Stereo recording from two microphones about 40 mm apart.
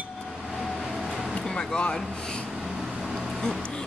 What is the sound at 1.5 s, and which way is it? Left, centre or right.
Speech, centre.